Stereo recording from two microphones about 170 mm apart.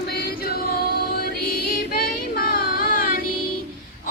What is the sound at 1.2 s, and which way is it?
Music, 65° left (ahead or behind).